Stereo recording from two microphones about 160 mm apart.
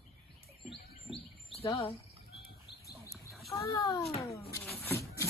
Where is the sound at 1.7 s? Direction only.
35° left (ahead or behind).